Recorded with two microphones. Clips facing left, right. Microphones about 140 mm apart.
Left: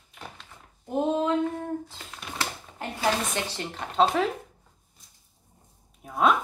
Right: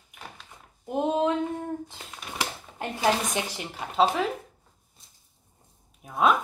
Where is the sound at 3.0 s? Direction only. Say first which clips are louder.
Right 2 dB; 10° right (ahead or behind).